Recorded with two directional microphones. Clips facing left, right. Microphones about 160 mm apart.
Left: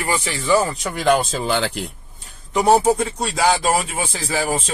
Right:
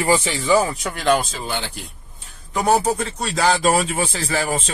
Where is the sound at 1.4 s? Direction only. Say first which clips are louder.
Left 6 dB; 90° left.